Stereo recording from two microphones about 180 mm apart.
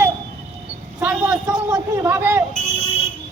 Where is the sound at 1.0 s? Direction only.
5° right (ahead or behind).